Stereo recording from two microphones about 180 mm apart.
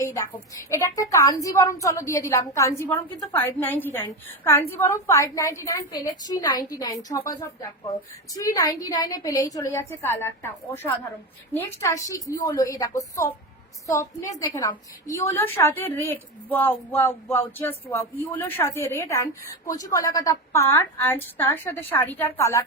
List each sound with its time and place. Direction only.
0.0 s a woman's voice: 15° left (ahead or behind)
8.4 s a woman's voice: 20° left (ahead or behind)